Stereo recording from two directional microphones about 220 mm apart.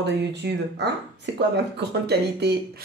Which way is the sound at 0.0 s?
50° right (ahead or behind).